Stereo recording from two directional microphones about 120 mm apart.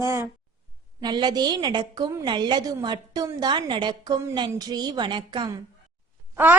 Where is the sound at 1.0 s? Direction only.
35° right (ahead or behind).